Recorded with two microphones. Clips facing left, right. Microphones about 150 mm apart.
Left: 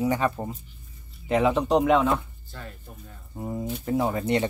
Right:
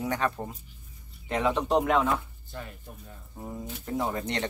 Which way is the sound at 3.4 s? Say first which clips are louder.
Left 7 dB; 15° left (ahead or behind).